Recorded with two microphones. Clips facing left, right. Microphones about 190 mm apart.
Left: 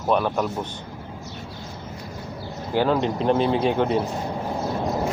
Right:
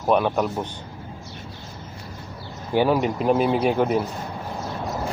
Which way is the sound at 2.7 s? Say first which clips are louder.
Right 1 dB; 10° right (ahead or behind).